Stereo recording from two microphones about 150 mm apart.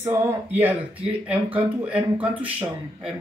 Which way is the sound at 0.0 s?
15° right (ahead or behind).